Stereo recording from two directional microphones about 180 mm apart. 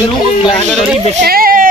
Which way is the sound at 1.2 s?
55° right (ahead or behind).